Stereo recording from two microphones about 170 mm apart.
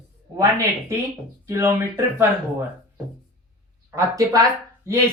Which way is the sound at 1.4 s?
15° right (ahead or behind).